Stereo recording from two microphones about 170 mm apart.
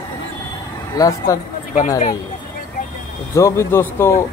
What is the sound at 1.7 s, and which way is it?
Speech, 45° left (ahead or behind).